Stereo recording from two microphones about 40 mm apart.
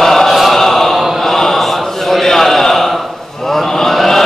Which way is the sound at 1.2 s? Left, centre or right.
Centre.